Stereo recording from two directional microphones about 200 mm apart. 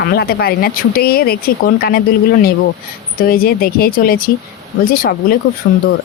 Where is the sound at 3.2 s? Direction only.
45° left (ahead or behind).